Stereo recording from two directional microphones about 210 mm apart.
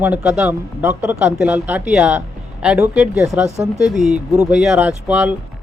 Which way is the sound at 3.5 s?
30° right (ahead or behind).